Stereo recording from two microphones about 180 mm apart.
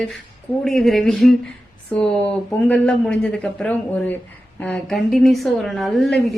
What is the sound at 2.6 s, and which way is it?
A woman's voice, 5° left (ahead or behind).